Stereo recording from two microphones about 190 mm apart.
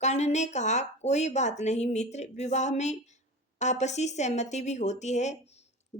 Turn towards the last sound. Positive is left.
turn(degrees=40)  # may be behind; listen again after turning